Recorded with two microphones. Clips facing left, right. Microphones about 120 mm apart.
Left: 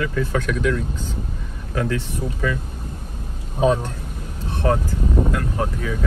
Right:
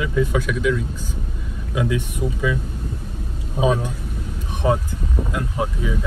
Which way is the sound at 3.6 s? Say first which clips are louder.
Left 1 dB; 5° right (ahead or behind).